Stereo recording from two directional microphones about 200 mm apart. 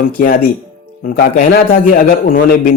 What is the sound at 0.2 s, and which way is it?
Speech, 40° left (ahead or behind).